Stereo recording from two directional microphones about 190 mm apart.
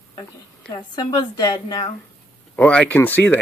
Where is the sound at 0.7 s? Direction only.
20° left (ahead or behind).